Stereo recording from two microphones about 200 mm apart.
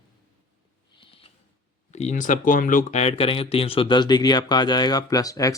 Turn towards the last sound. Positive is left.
turn(degrees=15)  # may be behind; listen again after turning